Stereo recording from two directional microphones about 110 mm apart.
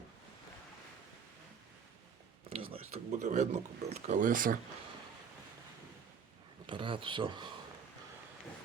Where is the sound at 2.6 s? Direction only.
75° right (ahead or behind).